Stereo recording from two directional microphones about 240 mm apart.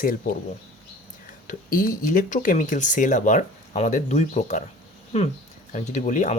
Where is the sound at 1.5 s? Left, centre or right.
Left.